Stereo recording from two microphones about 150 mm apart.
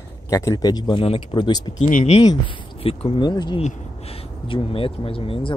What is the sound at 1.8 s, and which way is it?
Speech, 55° left (ahead or behind).